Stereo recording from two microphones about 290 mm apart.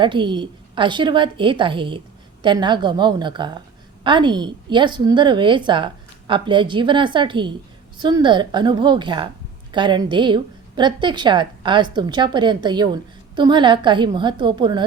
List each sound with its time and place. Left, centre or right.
0.0 s a woman's voice: centre